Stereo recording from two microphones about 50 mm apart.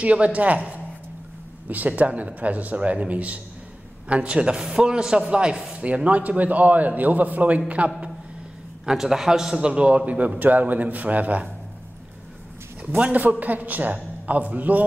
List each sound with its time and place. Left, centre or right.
0.0 s a man's voice: right
8.8 s speech: centre
9.7 s a man's voice: right
12.9 s a man's voice: right